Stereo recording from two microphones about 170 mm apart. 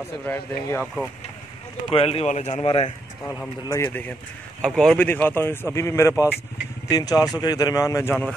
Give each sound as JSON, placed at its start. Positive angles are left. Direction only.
{"t": 0.2, "sound": "speech", "side_deg": 10}
{"t": 1.9, "sound": "speech", "side_deg": 35}
{"t": 3.6, "sound": "speech", "side_deg": 15}
{"t": 4.6, "sound": "speech", "side_deg": 0}